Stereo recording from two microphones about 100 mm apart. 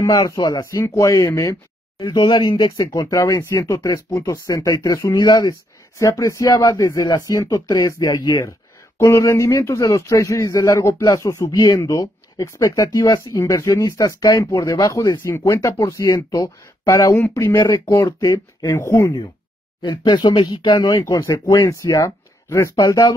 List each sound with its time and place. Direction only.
0.0 s speech: 35° left (ahead or behind)
0.7 s speech: 25° left (ahead or behind)
2.0 s speech: 50° left (ahead or behind)
2.8 s speech: 35° left (ahead or behind)
11.5 s speech: 45° left (ahead or behind)
11.8 s speech: 35° left (ahead or behind)
13.2 s speech: 30° left (ahead or behind)
15.1 s speech: 25° left (ahead or behind)
17.6 s speech: 50° left (ahead or behind)
17.8 s speech: 35° left (ahead or behind)
19.8 s speech: 45° left (ahead or behind)